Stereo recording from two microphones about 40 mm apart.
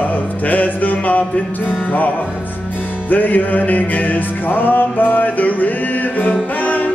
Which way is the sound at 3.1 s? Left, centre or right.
Left.